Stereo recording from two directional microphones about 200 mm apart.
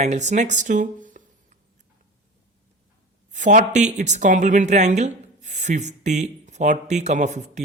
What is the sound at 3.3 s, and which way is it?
Speech, 40° right (ahead or behind).